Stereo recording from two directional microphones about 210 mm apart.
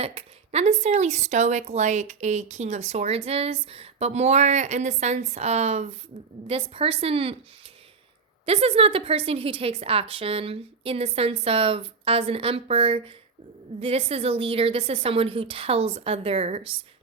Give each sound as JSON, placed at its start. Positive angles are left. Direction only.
{"t": 0.0, "sound": "a woman's voice", "side_deg": -25}
{"t": 8.4, "sound": "a woman's voice", "side_deg": -30}